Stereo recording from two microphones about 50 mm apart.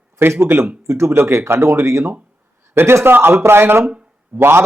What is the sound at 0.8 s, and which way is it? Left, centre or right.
A man's voice, right.